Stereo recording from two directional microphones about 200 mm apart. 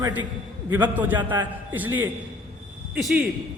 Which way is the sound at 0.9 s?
10° right (ahead or behind).